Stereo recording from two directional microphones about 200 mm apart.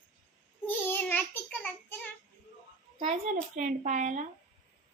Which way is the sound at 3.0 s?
40° right (ahead or behind).